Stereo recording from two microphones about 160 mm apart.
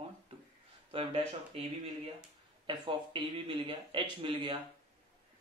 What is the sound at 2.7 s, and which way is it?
Speech, 30° right (ahead or behind).